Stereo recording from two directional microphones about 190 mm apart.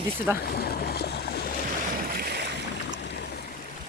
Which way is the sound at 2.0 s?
50° right (ahead or behind).